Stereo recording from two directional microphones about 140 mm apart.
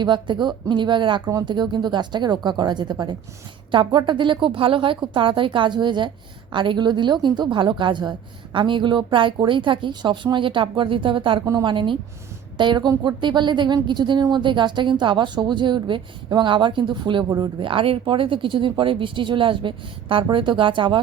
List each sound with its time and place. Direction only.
0.0 s speech: 35° right (ahead or behind)